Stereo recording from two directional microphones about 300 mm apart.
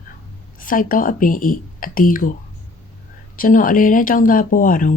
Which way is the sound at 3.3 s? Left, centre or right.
Left.